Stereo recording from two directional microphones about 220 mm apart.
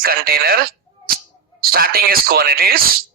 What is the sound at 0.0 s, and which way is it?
A man's voice, 45° right (ahead or behind).